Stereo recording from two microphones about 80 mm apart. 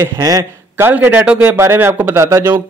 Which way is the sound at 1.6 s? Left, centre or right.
Right.